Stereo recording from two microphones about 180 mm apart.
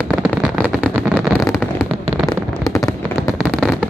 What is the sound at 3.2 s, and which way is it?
Fireworks, centre (ahead or behind).